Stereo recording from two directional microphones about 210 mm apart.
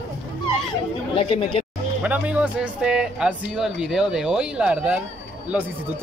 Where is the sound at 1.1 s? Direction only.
25° left (ahead or behind).